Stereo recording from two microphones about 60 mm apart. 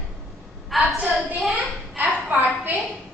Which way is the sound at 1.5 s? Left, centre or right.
Right.